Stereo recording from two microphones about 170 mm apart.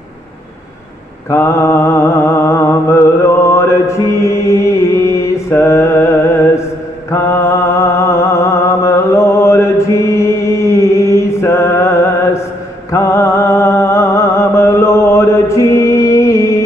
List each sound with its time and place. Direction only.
1.3 s mantra: 15° left (ahead or behind)
12.9 s music: 15° left (ahead or behind)